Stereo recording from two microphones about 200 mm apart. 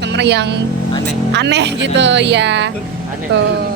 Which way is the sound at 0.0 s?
60° right (ahead or behind).